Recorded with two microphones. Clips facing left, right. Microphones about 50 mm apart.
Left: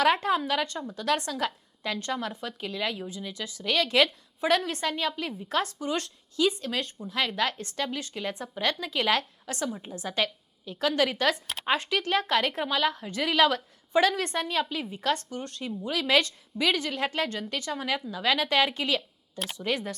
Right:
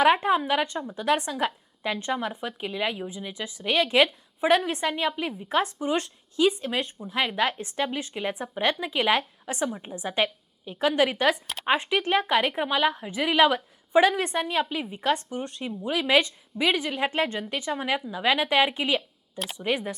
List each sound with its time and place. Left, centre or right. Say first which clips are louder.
0.0 s a woman's voice: right 3 dB; centre